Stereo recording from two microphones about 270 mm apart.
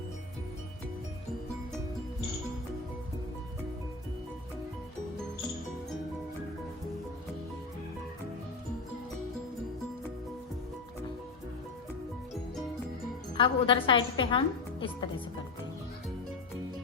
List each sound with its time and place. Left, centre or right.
13.3 s a woman's voice: centre